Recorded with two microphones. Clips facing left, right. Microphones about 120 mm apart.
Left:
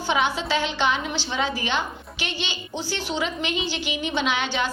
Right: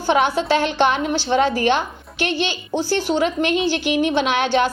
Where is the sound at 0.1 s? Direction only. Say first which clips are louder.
Right 6 dB; 55° right (ahead or behind).